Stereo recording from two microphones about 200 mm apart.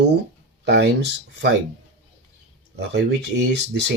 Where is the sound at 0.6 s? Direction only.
60° right (ahead or behind).